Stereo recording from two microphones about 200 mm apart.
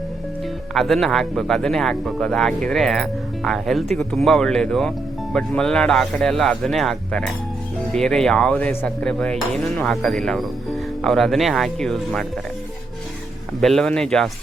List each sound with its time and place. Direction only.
0.7 s speech: centre (ahead or behind)
13.6 s speech: centre (ahead or behind)